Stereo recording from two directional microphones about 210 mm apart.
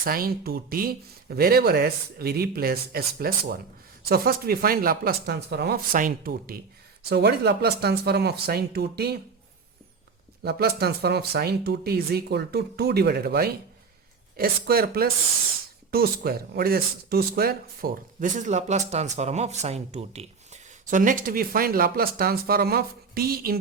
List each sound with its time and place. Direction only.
0.0 s speech: 45° right (ahead or behind)
10.4 s speech: 50° right (ahead or behind)